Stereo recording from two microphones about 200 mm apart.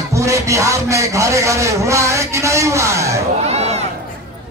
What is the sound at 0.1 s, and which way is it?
Speech, 15° right (ahead or behind).